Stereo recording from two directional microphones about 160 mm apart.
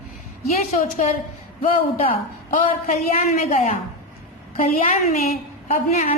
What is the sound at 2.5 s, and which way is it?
A man's voice, 55° left (ahead or behind).